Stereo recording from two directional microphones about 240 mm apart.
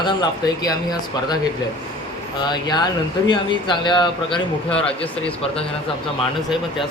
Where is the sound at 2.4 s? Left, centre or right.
Centre.